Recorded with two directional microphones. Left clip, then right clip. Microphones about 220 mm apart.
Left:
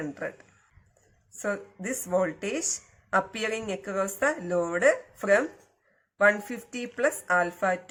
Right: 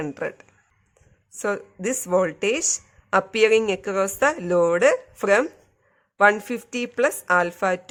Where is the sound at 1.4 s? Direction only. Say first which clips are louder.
Right 6 dB; 55° right (ahead or behind).